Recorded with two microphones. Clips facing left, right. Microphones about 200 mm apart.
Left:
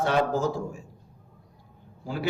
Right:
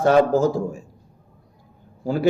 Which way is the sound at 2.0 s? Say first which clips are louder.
Right 9 dB; 45° right (ahead or behind).